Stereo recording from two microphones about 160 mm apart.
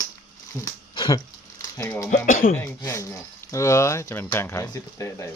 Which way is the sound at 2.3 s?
60° left (ahead or behind).